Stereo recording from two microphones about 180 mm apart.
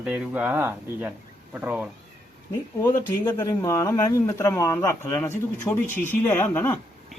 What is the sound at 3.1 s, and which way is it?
Speech, 15° left (ahead or behind).